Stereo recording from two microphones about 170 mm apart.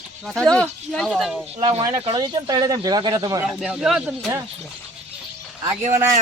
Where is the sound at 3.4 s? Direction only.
5° right (ahead or behind).